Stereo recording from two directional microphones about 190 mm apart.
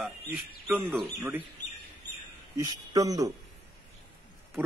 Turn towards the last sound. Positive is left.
turn(degrees=-10)  # may be behind; listen again after turning